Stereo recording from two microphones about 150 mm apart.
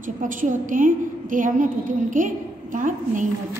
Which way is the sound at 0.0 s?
60° right (ahead or behind).